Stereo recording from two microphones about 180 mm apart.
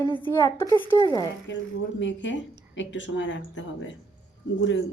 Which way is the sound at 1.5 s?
90° left.